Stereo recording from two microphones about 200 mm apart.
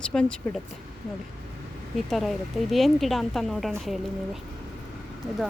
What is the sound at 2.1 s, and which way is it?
Speech, centre (ahead or behind).